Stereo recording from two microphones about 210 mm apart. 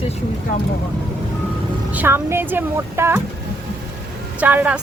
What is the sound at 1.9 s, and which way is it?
A woman's voice, 10° right (ahead or behind).